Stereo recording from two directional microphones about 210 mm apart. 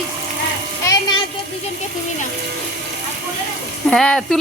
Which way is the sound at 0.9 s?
20° left (ahead or behind).